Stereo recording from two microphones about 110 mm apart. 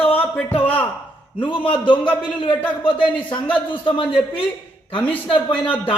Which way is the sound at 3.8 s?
45° left (ahead or behind).